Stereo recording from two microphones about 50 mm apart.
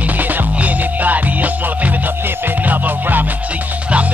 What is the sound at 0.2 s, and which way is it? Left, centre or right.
Music, right.